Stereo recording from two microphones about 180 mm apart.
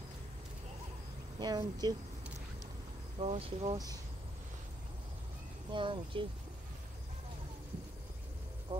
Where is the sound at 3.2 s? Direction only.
30° right (ahead or behind).